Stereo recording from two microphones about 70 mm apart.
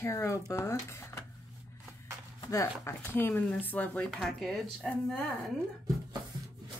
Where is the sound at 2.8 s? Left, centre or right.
Left.